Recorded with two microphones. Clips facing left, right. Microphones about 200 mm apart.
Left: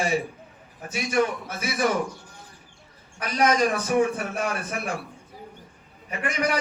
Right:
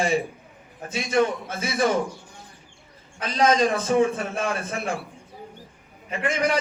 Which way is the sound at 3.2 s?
25° right (ahead or behind).